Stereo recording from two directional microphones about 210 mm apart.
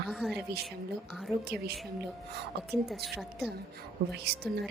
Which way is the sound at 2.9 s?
Centre (ahead or behind).